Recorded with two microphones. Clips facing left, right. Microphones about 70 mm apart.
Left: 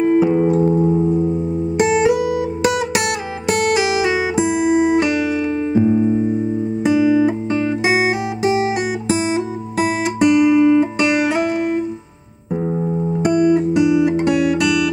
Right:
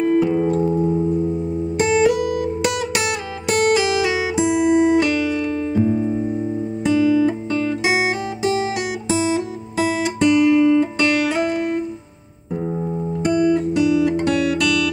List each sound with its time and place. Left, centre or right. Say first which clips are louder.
0.0 s music: left 3 dB; centre
3.7 s music: left 1 dB; centre
6.8 s guitar: left 2 dB; centre
13.2 s guitar: left 2 dB; centre